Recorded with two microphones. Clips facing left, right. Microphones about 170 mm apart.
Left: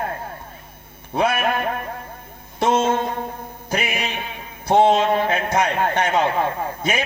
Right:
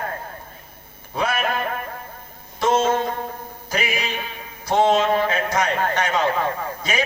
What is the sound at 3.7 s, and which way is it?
Music, 60° left (ahead or behind).